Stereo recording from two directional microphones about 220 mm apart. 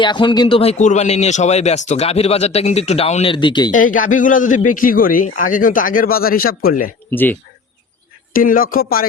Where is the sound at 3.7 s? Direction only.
35° left (ahead or behind).